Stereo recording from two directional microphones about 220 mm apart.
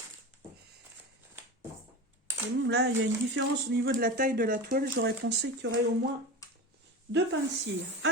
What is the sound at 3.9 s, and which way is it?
Speech, 40° right (ahead or behind).